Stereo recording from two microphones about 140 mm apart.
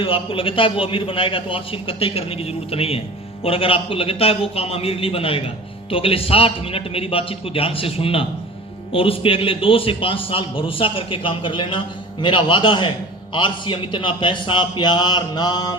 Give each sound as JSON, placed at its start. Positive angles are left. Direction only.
{"t": 0.0, "sound": "a man's voice", "side_deg": 40}